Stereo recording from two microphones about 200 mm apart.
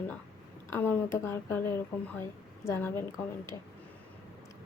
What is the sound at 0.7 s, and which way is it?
Speech, 10° left (ahead or behind).